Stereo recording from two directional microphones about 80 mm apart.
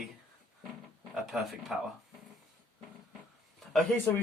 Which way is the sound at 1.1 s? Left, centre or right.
Centre.